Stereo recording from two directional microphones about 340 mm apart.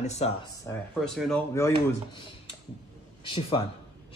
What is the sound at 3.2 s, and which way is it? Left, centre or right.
Speech, centre.